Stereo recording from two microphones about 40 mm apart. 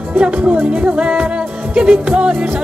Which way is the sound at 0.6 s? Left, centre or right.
Right.